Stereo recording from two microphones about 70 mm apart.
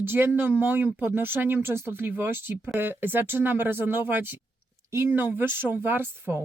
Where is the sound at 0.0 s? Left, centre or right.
Right.